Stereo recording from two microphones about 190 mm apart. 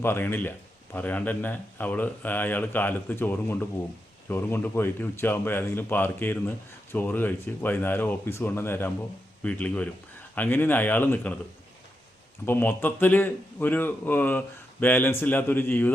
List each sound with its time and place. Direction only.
0.0 s a man's voice: 10° left (ahead or behind)
12.5 s a man's voice: 10° left (ahead or behind)